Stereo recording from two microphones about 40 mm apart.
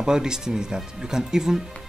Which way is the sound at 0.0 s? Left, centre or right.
Centre.